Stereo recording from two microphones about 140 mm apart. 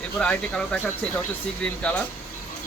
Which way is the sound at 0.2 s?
5° left (ahead or behind).